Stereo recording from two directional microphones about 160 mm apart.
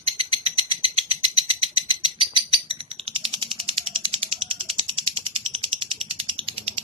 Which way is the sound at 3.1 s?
35° right (ahead or behind).